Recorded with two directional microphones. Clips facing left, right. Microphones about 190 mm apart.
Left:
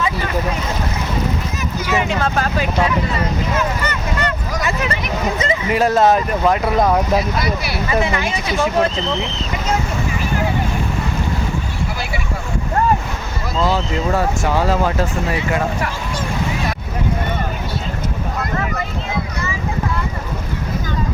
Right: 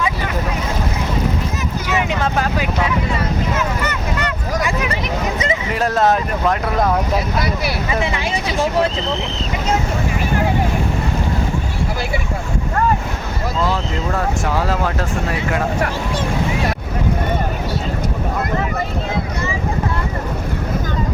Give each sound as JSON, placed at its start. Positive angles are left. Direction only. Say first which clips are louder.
{"t": 1.9, "sound": "speech", "louder": "left 1 dB", "side_deg": -15}
{"t": 5.7, "sound": "speech", "louder": "left 3 dB", "side_deg": 0}
{"t": 14.1, "sound": "speech", "louder": "left 2 dB", "side_deg": 0}